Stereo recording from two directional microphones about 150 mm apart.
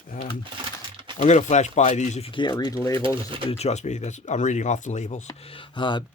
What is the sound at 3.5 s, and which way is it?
Speech, 45° left (ahead or behind).